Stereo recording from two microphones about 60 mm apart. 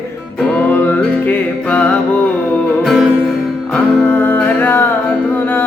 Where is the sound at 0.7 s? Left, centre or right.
Left.